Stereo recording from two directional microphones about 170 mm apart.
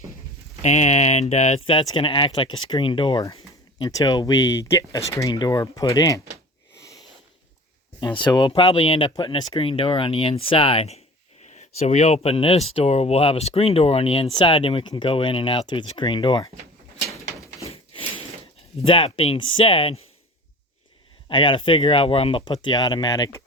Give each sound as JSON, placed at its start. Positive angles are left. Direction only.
{"t": 0.6, "sound": "speech", "side_deg": 40}
{"t": 8.0, "sound": "speech", "side_deg": 25}
{"t": 17.6, "sound": "a sound", "side_deg": 35}
{"t": 18.9, "sound": "speech", "side_deg": 30}
{"t": 21.2, "sound": "speech", "side_deg": 30}